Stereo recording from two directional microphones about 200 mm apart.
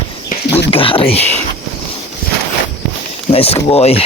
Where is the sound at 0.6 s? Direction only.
25° left (ahead or behind).